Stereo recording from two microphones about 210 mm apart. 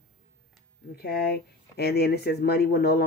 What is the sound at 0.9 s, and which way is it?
Speech, 50° left (ahead or behind).